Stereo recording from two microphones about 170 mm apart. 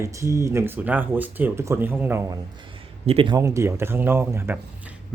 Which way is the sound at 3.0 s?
30° right (ahead or behind).